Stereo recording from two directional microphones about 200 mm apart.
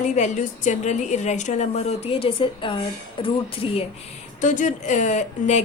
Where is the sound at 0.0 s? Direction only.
35° left (ahead or behind).